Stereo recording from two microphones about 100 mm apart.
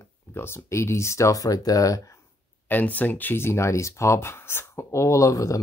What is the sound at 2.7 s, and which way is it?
Speech, 15° left (ahead or behind).